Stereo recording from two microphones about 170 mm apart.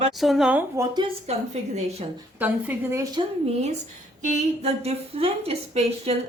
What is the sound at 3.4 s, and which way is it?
A woman's voice, 40° right (ahead or behind).